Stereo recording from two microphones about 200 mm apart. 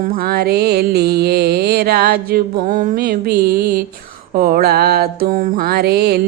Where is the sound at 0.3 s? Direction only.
50° right (ahead or behind).